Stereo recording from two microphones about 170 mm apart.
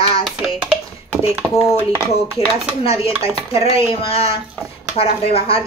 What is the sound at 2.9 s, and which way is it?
A woman's voice, 35° left (ahead or behind).